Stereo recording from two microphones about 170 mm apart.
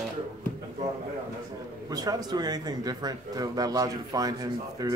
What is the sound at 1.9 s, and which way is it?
Speech, 25° right (ahead or behind).